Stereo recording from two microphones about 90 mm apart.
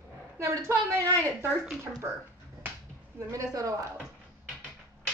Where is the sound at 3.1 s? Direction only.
40° right (ahead or behind).